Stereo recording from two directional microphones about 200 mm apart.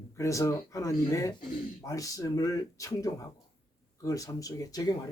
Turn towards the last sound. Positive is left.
turn(degrees=20)  # may be behind; listen again after turning